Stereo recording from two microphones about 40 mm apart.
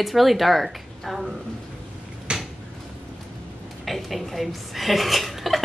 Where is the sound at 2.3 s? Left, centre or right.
Right.